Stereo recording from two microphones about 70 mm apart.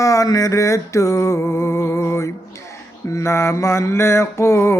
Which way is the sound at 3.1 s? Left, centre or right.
Left.